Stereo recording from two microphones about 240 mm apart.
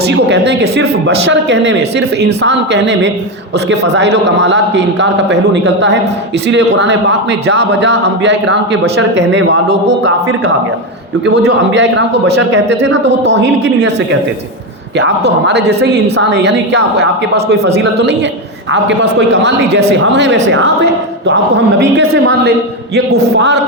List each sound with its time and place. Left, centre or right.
0.1 s a man's voice: right
11.4 s a man's voice: right